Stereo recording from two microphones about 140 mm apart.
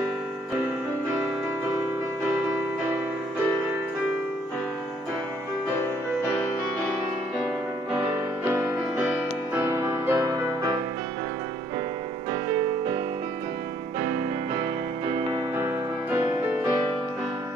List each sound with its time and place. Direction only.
8.5 s music: 15° right (ahead or behind)
15.5 s music: 15° right (ahead or behind)